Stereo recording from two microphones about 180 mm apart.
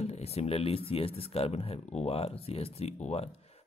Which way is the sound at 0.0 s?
35° left (ahead or behind).